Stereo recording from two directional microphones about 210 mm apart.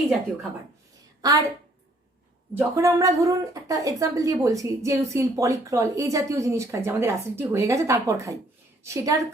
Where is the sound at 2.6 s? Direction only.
15° right (ahead or behind).